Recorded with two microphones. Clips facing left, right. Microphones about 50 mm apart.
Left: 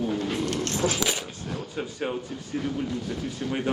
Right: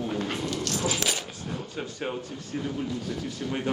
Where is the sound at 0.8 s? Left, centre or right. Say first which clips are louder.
Left 3 dB; left.